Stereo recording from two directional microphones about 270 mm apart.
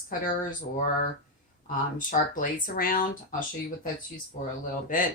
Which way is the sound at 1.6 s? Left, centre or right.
Left.